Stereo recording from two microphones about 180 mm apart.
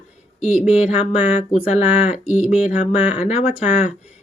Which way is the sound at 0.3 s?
40° left (ahead or behind).